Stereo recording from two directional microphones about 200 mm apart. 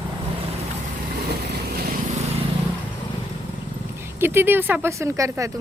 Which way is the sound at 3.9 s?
10° right (ahead or behind).